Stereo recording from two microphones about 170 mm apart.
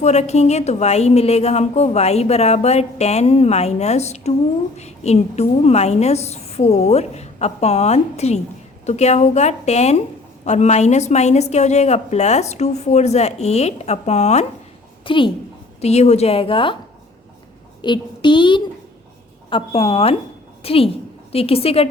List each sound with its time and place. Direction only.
0.0 s a woman's voice: 40° left (ahead or behind)
15.0 s a woman's voice: 30° left (ahead or behind)
15.8 s a woman's voice: 40° left (ahead or behind)
17.8 s a woman's voice: 25° left (ahead or behind)